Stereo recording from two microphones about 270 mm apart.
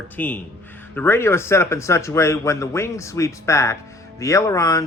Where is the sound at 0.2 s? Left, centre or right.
Centre.